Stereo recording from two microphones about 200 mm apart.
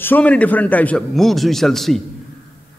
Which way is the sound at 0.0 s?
10° left (ahead or behind).